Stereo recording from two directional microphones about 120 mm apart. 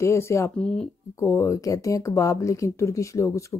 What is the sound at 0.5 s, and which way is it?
Speech, 5° left (ahead or behind).